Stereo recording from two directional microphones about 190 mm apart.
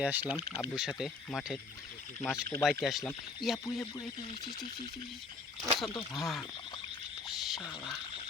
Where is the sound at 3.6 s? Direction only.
15° left (ahead or behind).